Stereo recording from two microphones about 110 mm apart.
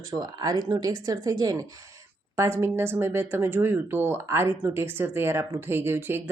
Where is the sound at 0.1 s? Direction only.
35° right (ahead or behind).